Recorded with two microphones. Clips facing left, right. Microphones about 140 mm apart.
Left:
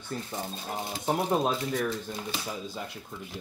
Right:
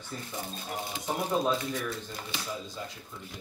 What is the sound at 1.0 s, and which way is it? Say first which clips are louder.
Speech: left 3 dB; 60° left (ahead or behind).